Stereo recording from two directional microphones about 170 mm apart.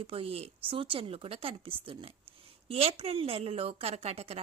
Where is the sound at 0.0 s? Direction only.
35° right (ahead or behind).